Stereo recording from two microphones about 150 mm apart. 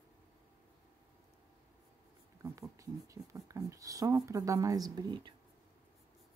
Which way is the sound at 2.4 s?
20° right (ahead or behind).